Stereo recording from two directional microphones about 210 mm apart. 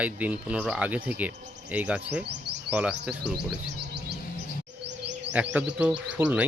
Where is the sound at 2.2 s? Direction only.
55° right (ahead or behind).